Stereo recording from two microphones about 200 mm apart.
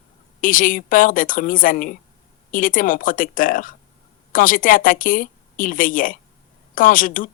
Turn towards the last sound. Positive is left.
turn(degrees=40)  # may be behind; listen again after turning